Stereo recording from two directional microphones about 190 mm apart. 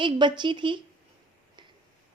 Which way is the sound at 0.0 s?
25° right (ahead or behind).